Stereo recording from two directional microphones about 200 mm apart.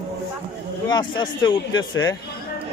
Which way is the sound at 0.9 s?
20° left (ahead or behind).